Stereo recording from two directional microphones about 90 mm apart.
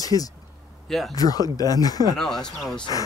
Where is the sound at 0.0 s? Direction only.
45° left (ahead or behind).